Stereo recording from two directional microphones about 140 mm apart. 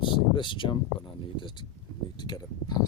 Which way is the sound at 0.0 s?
35° left (ahead or behind).